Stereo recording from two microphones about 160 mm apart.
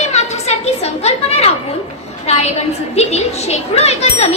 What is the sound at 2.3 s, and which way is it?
A woman's voice, 40° left (ahead or behind).